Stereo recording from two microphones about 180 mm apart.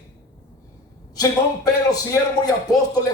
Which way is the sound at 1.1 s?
20° left (ahead or behind).